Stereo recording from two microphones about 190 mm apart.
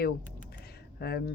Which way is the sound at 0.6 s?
55° left (ahead or behind).